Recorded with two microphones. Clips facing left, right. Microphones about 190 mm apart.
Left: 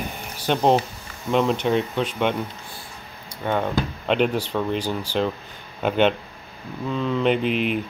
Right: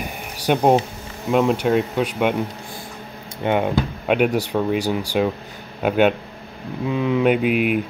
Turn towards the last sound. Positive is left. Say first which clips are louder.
# right 3 dB
turn(degrees=-10)  # may be behind; listen again after turning